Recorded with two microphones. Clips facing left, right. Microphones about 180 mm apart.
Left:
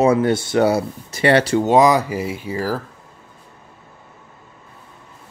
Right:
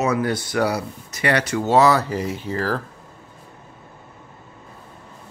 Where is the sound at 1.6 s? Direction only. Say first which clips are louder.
Right 2 dB; 15° left (ahead or behind).